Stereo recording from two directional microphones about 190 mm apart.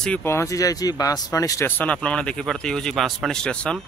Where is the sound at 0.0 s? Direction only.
10° left (ahead or behind).